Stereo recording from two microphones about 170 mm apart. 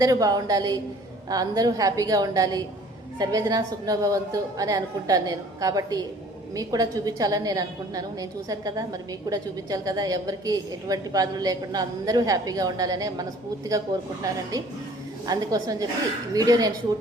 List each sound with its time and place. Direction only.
0.0 s a woman's voice: 20° right (ahead or behind)